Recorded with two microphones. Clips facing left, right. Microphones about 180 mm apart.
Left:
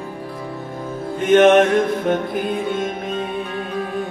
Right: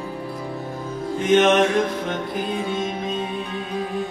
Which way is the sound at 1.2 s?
55° left (ahead or behind).